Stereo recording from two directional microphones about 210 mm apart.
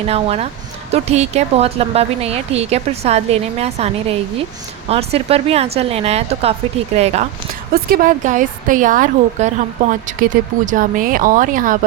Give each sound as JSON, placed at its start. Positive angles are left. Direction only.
{"t": 0.1, "sound": "a woman's voice", "side_deg": -30}
{"t": 7.7, "sound": "a woman's voice", "side_deg": -45}